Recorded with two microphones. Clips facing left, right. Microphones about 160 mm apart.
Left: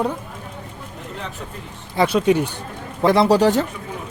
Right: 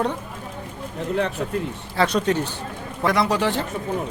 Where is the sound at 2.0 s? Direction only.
10° left (ahead or behind).